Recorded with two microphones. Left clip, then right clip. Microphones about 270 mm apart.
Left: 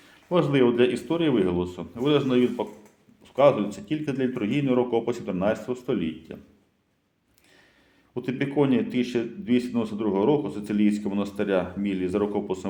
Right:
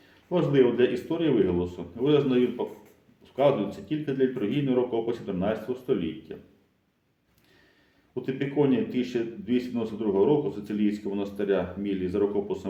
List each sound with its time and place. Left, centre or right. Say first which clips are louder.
0.3 s a man's voice: left 1 dB; left
8.1 s a man's voice: left 2 dB; left